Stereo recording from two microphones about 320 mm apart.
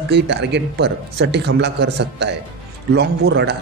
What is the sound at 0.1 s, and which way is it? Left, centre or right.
A man's voice, right.